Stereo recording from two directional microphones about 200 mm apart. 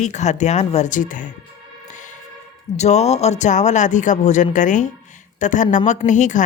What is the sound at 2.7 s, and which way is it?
A woman's voice, 35° left (ahead or behind).